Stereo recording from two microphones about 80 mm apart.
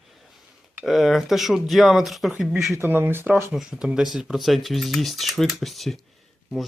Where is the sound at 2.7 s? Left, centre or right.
Right.